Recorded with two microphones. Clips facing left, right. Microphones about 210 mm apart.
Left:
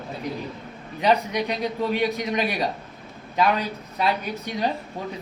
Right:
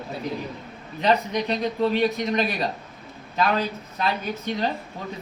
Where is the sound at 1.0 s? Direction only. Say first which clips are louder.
Left 1 dB; 10° left (ahead or behind).